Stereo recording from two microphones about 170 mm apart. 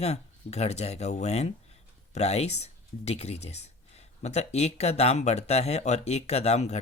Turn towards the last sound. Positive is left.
turn(degrees=40)  # may be behind; listen again after turning